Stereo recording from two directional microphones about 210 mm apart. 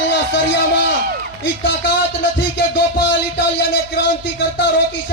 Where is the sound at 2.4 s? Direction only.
55° left (ahead or behind).